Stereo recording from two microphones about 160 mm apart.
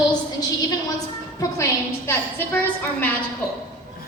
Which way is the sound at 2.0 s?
10° left (ahead or behind).